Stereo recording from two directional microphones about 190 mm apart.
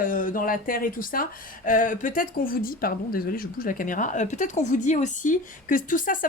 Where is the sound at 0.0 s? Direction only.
45° left (ahead or behind).